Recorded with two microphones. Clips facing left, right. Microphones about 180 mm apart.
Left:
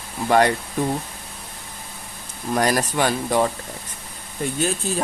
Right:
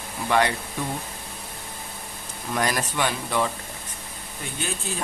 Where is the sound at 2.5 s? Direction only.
40° left (ahead or behind).